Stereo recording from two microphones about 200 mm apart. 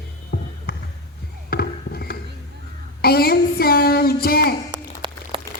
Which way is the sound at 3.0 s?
50° left (ahead or behind).